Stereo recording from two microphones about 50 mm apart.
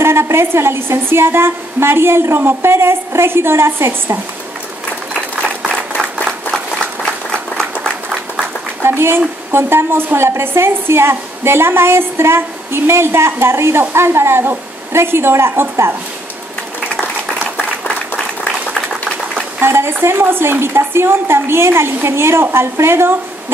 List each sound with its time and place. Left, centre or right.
0.0 s a woman's voice: right
6.2 s a sound: centre
8.8 s a woman's voice: right
17.8 s applause: left
19.6 s a woman's voice: right